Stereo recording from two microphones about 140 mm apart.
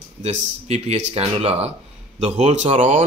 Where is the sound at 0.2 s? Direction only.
55° right (ahead or behind).